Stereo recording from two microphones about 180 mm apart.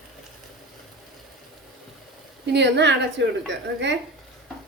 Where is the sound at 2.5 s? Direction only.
70° right (ahead or behind).